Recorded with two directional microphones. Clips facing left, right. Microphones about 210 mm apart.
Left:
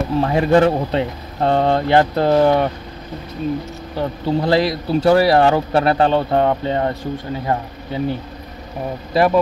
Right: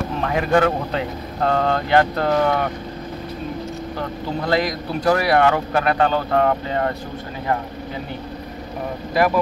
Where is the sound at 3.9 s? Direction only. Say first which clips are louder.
Left 9 dB; 30° left (ahead or behind).